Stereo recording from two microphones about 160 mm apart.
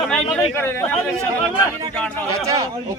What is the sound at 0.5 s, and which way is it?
Speech, 15° left (ahead or behind).